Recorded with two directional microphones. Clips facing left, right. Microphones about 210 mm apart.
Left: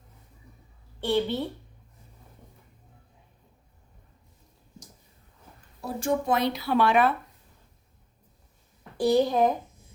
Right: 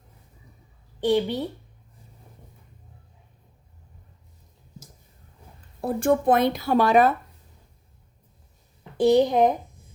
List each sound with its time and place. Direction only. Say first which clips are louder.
1.0 s a woman's voice: right 3 dB; 15° right (ahead or behind)
5.8 s speech: right 6 dB; 55° right (ahead or behind)
9.0 s a child's voice: right 4 dB; 20° right (ahead or behind)